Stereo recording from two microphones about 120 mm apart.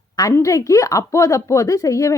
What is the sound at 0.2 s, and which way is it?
A woman's voice, 25° left (ahead or behind).